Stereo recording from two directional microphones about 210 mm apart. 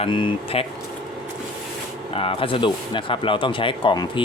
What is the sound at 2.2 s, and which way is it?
Speech, 25° left (ahead or behind).